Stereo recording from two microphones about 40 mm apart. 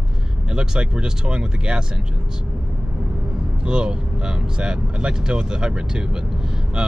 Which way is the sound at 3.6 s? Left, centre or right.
Right.